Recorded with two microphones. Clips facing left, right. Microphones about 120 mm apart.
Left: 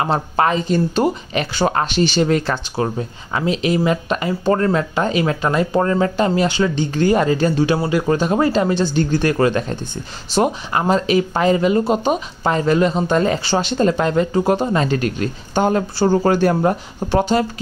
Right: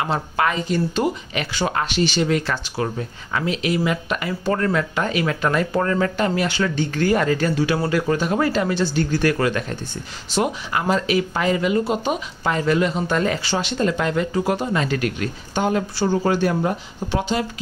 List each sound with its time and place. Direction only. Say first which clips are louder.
0.0 s speech: left 4 dB; 35° left (ahead or behind)